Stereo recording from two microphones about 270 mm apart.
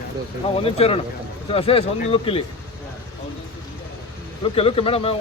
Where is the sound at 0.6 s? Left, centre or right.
Left.